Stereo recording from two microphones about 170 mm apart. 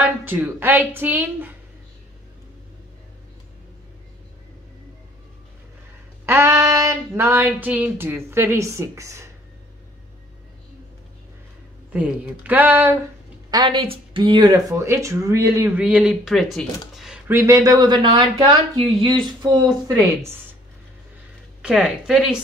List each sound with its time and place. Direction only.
0.0 s speech: 10° right (ahead or behind)
6.2 s speech: 15° right (ahead or behind)
11.9 s speech: 10° right (ahead or behind)
13.5 s speech: 30° right (ahead or behind); by 16.6 s centre (ahead or behind)
16.9 s a sound: centre (ahead or behind)
17.3 s speech: 15° right (ahead or behind)
21.5 s speech: 5° right (ahead or behind)